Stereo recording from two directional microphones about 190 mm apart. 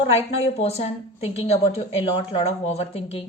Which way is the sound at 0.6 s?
35° left (ahead or behind).